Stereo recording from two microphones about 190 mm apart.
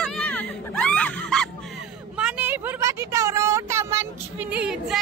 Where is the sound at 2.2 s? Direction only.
10° right (ahead or behind).